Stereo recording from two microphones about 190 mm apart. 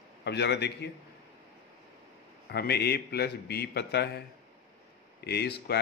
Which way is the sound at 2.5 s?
55° left (ahead or behind).